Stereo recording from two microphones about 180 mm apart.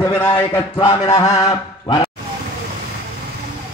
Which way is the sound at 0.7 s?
30° left (ahead or behind).